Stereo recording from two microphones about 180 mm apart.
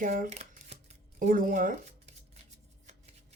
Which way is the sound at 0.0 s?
45° right (ahead or behind).